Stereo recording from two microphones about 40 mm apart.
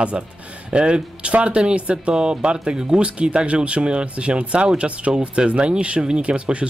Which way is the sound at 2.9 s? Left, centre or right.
Right.